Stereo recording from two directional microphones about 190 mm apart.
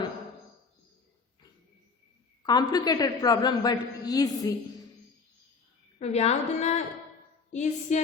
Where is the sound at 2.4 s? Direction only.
20° left (ahead or behind).